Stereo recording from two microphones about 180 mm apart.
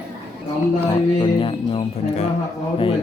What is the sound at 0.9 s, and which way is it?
A man's voice, 30° left (ahead or behind).